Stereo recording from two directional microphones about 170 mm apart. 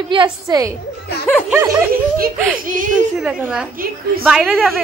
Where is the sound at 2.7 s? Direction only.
50° right (ahead or behind).